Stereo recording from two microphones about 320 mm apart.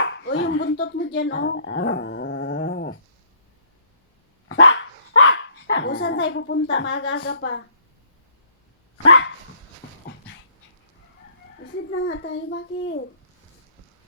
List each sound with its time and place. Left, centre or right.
0.0 s speech: left
4.4 s dog: left
6.2 s a child's voice: left
9.0 s a child's voice: left
11.6 s a child's voice: left